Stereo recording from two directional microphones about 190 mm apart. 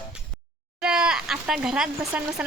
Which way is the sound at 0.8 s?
5° right (ahead or behind).